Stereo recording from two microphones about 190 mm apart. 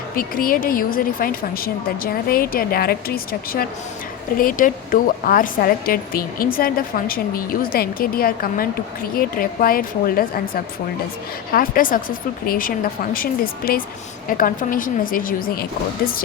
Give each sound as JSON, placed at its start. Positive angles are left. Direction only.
{"t": 0.2, "sound": "a woman's voice", "side_deg": 50}